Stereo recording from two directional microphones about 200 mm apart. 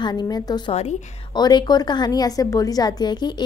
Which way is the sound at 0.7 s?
35° left (ahead or behind).